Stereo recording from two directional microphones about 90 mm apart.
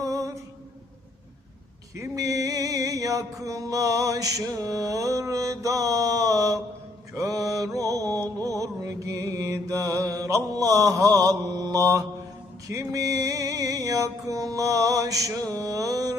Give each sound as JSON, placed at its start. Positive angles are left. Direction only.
{"t": 0.0, "sound": "mantra", "side_deg": -35}
{"t": 2.0, "sound": "music", "side_deg": -40}
{"t": 7.1, "sound": "mantra", "side_deg": -40}
{"t": 12.6, "sound": "music", "side_deg": -35}